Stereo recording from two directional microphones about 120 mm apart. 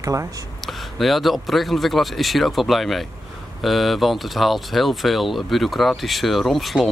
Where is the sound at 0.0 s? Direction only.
25° right (ahead or behind).